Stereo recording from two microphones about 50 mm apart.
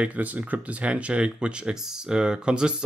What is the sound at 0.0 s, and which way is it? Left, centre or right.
Speech, right.